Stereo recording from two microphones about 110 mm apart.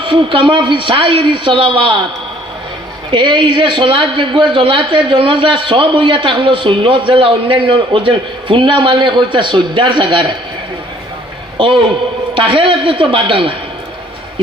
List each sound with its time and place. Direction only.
0.0 s a man's voice: 50° right (ahead or behind)
3.1 s a man's voice: 45° right (ahead or behind)
11.5 s a man's voice: 50° right (ahead or behind)